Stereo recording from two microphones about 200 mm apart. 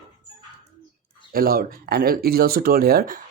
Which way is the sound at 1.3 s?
45° right (ahead or behind).